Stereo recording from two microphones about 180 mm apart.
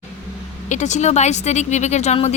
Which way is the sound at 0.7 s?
40° left (ahead or behind).